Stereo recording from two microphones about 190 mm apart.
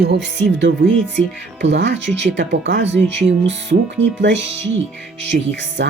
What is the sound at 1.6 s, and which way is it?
Speech, 70° right (ahead or behind).